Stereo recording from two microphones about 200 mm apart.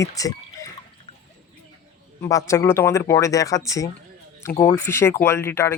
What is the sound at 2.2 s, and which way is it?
Speech, 15° left (ahead or behind).